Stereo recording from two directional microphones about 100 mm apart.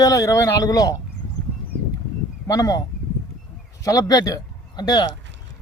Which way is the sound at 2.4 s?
40° left (ahead or behind).